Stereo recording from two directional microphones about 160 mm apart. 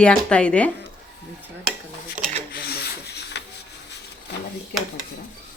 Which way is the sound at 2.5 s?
80° left.